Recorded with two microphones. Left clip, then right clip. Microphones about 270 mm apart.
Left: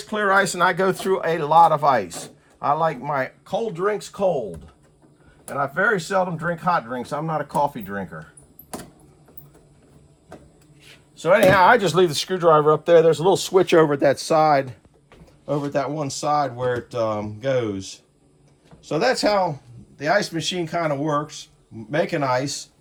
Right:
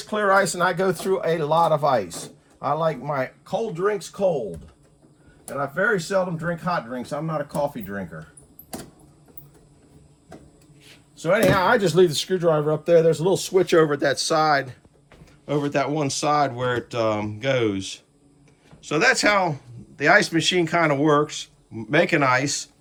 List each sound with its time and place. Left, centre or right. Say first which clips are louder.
0.0 s speech: even; centre
5.5 s speech: left 2 dB; centre
11.2 s speech: left 4 dB; centre
15.4 s speech: even; centre